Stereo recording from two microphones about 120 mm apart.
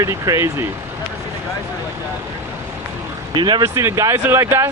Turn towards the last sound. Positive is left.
turn(degrees=-20)  # may be behind; listen again after turning